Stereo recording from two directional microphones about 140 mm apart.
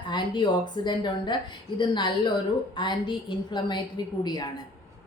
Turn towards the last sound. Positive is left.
turn(degrees=30)  # may be behind; listen again after turning